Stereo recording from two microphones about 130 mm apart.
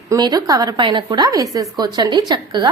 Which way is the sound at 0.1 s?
30° right (ahead or behind).